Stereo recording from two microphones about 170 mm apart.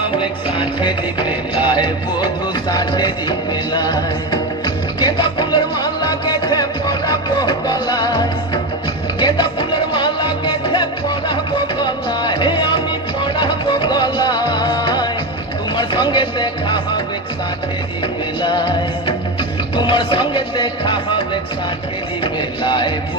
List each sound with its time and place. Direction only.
0.2 s music: 30° left (ahead or behind)
18.4 s music: 25° left (ahead or behind)
22.2 s music: 25° left (ahead or behind)